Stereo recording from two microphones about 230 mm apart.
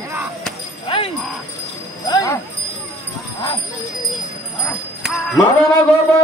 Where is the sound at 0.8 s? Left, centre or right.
Left.